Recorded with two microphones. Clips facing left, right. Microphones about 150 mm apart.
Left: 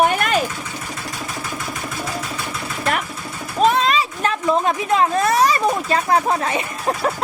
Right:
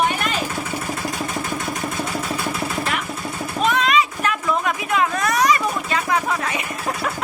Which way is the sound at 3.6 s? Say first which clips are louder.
Left 2 dB; 35° left (ahead or behind).